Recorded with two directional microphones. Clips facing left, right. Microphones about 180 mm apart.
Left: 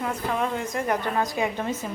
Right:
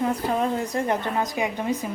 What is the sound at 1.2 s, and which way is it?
Speech, 15° right (ahead or behind).